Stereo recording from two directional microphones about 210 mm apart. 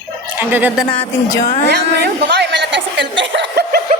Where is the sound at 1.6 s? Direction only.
55° right (ahead or behind).